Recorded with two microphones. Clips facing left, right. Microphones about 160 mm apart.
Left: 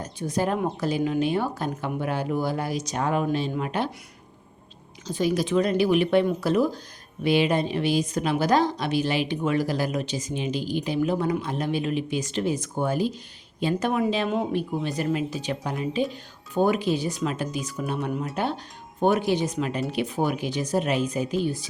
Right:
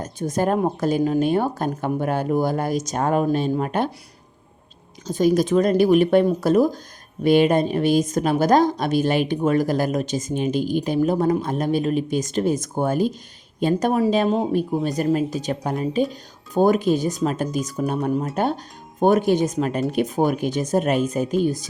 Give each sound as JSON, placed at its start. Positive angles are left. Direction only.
{"t": 0.0, "sound": "a woman's voice", "side_deg": -45}
{"t": 5.0, "sound": "a woman's voice", "side_deg": -45}